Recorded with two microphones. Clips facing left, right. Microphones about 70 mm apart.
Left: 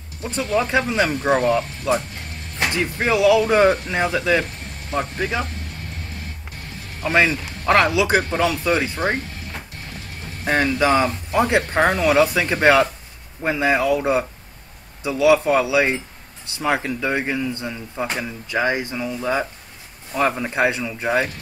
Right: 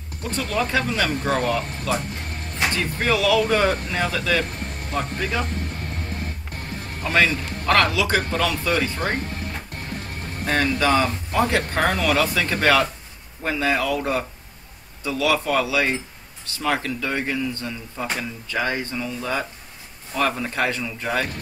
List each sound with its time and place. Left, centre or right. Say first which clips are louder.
0.2 s a man's voice: left 3 dB; left
7.1 s a man's voice: left 2 dB; left
10.4 s a man's voice: left 2 dB; left